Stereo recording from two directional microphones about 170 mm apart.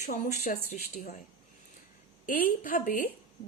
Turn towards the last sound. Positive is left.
turn(degrees=55)  # may be behind; listen again after turning